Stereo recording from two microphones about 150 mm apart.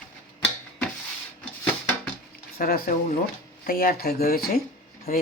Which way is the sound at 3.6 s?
70° left (ahead or behind).